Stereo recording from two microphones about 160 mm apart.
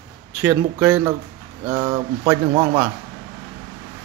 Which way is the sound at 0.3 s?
10° right (ahead or behind).